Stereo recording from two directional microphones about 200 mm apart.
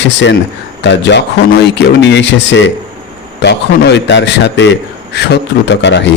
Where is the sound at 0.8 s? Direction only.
60° left (ahead or behind).